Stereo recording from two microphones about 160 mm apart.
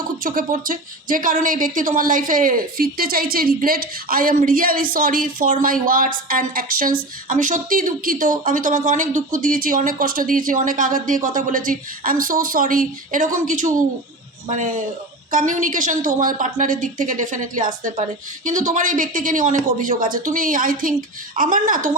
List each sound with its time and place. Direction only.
0.2 s speech: 60° right (ahead or behind)